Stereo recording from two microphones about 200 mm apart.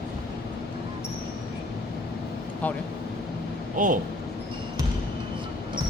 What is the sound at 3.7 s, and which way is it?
Speech, 40° right (ahead or behind).